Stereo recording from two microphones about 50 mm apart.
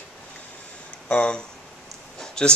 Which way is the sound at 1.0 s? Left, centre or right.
Left.